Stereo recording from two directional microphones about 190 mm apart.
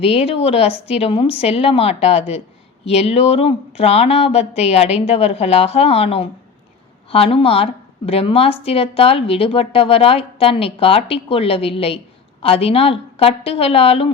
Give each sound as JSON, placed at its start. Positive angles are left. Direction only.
{"t": 0.0, "sound": "a woman's voice", "side_deg": 30}